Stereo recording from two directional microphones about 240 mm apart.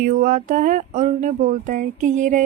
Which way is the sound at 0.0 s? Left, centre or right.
Right.